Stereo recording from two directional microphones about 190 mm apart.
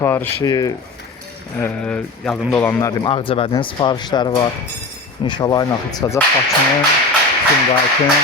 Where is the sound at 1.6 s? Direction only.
5° left (ahead or behind).